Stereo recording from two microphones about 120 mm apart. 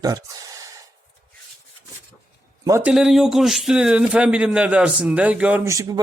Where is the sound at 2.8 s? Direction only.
5° right (ahead or behind).